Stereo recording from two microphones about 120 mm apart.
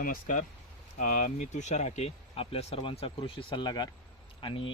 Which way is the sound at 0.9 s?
90° left.